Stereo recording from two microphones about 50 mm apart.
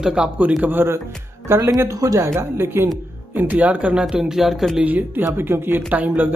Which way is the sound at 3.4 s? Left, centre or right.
Right.